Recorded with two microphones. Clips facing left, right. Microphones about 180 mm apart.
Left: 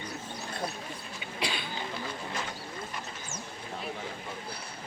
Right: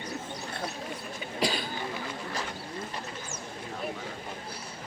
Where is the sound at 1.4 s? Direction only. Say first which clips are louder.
Right 5 dB; 40° right (ahead or behind).